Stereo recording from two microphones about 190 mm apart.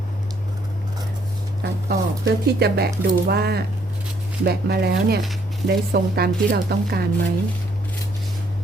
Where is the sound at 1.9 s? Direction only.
55° right (ahead or behind).